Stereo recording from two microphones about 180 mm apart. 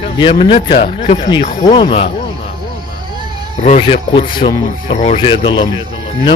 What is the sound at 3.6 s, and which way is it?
Speech, 40° left (ahead or behind).